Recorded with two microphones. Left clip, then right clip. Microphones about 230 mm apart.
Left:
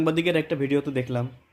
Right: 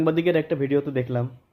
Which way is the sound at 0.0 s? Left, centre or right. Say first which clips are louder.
Right 2 dB; centre.